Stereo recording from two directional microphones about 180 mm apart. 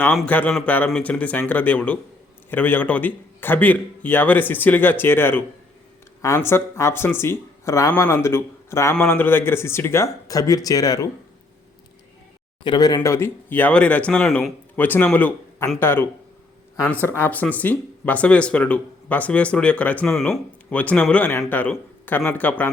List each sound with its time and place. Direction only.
0.2 s speech: 10° left (ahead or behind)
12.6 s speech: 25° left (ahead or behind)